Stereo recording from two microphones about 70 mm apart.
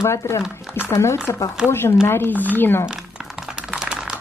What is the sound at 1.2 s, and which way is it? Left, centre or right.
Speech, left.